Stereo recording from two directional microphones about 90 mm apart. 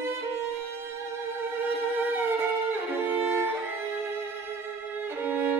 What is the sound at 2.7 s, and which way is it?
Violin, 20° right (ahead or behind).